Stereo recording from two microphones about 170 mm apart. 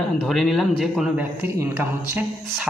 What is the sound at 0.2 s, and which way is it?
Speech, centre (ahead or behind).